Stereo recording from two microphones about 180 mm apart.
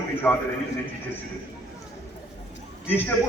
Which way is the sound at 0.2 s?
10° left (ahead or behind).